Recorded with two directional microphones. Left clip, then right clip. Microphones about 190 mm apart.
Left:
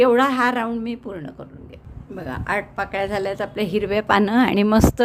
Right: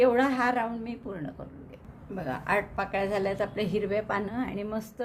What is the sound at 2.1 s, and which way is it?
A woman's voice, 25° left (ahead or behind).